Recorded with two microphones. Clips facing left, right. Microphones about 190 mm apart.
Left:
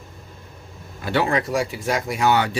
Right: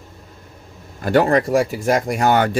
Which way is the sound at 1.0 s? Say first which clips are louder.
Right 6 dB; 45° right (ahead or behind).